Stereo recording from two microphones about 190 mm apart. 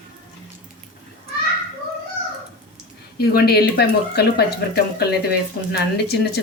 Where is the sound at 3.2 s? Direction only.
55° left (ahead or behind).